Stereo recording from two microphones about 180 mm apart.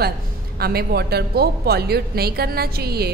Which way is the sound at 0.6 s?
60° right (ahead or behind).